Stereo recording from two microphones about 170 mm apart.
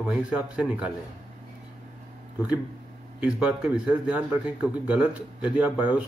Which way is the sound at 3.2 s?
5° right (ahead or behind).